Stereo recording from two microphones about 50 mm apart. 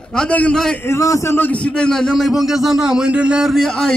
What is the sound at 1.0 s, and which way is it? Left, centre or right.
Speech, left.